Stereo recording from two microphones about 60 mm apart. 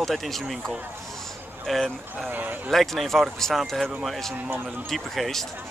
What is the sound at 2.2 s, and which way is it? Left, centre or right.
Speech, right.